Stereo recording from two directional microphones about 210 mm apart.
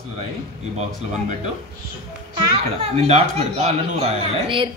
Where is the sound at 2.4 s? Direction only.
25° right (ahead or behind).